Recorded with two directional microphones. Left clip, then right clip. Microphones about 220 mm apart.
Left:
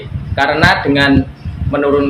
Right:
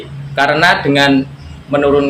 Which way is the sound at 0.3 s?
20° right (ahead or behind).